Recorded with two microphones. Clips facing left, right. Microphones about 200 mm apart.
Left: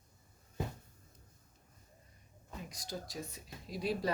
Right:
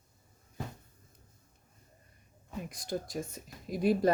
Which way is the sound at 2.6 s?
55° right (ahead or behind).